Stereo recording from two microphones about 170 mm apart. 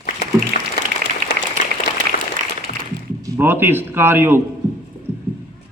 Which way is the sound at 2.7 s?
50° left (ahead or behind).